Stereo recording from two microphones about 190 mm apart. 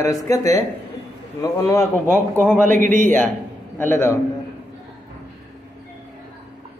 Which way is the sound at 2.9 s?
40° right (ahead or behind).